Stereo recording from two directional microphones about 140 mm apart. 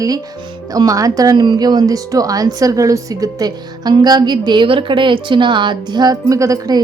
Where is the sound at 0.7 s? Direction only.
25° right (ahead or behind).